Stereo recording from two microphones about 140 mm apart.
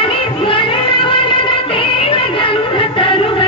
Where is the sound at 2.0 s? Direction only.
40° left (ahead or behind).